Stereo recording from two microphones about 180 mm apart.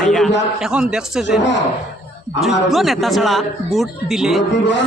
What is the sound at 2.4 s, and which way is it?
Speech, centre (ahead or behind).